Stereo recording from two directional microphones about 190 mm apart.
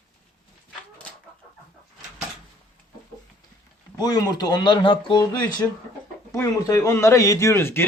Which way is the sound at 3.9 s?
20° left (ahead or behind).